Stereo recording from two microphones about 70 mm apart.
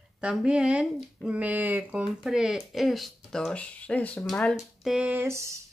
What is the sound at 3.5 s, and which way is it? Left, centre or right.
Speech, centre.